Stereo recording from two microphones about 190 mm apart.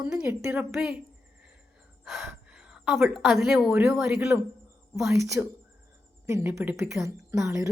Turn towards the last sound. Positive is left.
turn(degrees=-15)  # may be behind; listen again after turning